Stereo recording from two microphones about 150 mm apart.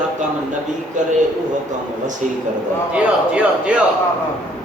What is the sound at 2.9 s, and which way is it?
Speech, 5° right (ahead or behind).